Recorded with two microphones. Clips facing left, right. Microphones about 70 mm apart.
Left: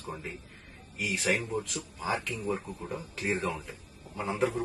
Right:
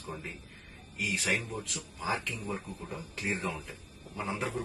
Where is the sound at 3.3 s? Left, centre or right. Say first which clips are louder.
Left 3 dB; centre.